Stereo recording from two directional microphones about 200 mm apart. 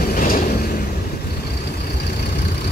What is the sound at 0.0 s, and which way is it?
Vehicle, 50° left (ahead or behind).